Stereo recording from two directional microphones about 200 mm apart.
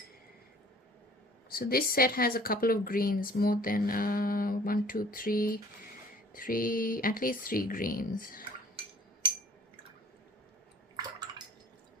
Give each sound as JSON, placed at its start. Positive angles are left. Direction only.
{"t": 1.5, "sound": "speech", "side_deg": 50}
{"t": 10.9, "sound": "bathtub", "side_deg": -20}